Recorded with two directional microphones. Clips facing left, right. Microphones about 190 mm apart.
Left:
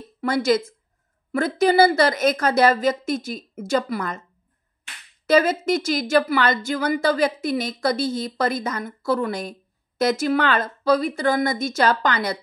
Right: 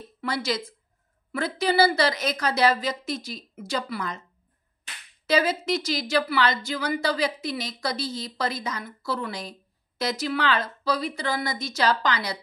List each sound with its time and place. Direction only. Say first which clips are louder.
0.2 s a woman's voice: left 8 dB; 50° left (ahead or behind)
5.2 s a woman's voice: left 5 dB; 50° left (ahead or behind)